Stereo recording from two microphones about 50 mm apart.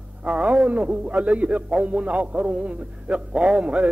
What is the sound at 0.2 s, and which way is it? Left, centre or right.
A man's voice, right.